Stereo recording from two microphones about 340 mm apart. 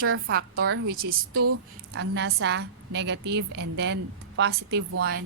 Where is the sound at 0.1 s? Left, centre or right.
Right.